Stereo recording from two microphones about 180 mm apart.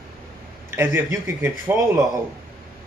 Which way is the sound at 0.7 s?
15° right (ahead or behind).